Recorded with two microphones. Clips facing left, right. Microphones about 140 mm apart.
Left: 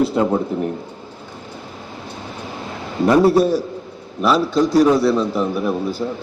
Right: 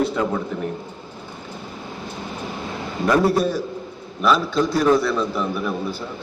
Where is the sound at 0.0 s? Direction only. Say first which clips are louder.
Left 5 dB; 35° left (ahead or behind).